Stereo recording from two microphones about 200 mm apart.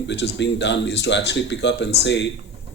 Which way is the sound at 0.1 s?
60° left (ahead or behind).